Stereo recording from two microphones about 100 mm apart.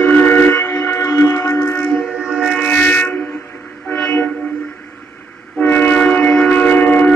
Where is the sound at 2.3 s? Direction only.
5° left (ahead or behind).